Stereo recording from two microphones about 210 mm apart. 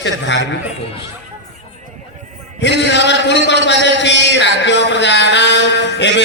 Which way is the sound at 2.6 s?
55° left (ahead or behind).